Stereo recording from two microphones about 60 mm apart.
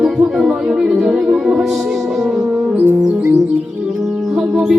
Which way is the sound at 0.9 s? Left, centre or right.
Centre.